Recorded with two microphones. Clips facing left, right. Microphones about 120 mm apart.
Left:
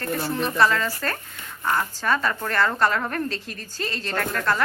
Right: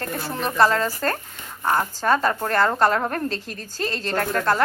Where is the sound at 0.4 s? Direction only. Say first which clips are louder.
Right 3 dB; 35° right (ahead or behind).